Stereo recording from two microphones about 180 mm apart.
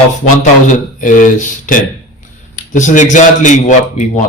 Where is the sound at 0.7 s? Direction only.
45° left (ahead or behind).